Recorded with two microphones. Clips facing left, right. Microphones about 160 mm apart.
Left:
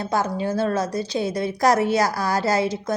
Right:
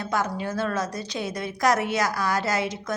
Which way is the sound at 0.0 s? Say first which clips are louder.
Left 4 dB; 30° left (ahead or behind).